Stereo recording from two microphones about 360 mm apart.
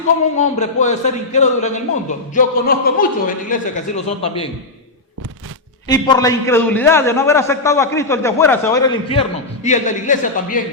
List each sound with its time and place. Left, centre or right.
0.3 s speech: centre
5.9 s a man's voice: centre